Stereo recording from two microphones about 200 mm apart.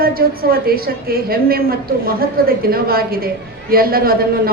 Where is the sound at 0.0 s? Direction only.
50° right (ahead or behind).